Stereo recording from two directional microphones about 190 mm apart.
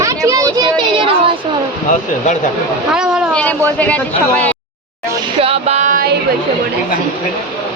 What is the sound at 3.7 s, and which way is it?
Speech, 10° left (ahead or behind).